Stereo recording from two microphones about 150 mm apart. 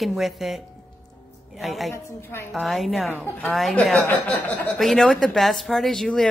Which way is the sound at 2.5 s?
Centre (ahead or behind).